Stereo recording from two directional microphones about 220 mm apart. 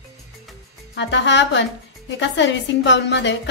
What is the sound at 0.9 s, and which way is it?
A woman's voice, 55° left (ahead or behind).